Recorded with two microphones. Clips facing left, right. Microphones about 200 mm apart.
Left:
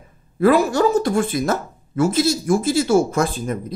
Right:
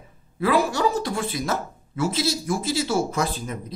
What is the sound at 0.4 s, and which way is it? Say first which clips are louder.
Speech: left 6 dB; 50° left (ahead or behind).